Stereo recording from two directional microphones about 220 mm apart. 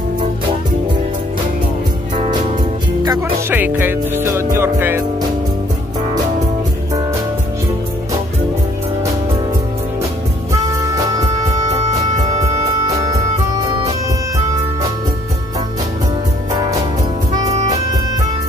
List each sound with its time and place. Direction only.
3.0 s music: 15° right (ahead or behind)
10.5 s music: 15° right (ahead or behind)
17.3 s music: 15° right (ahead or behind)